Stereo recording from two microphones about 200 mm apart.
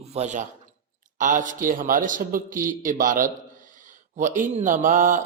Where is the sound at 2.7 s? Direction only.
40° right (ahead or behind).